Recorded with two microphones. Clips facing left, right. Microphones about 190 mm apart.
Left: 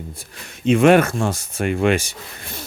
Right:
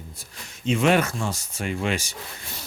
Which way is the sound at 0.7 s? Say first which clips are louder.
Left 7 dB; 55° left (ahead or behind).